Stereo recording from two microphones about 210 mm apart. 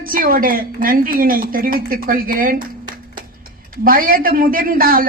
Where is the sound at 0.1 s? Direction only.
40° right (ahead or behind).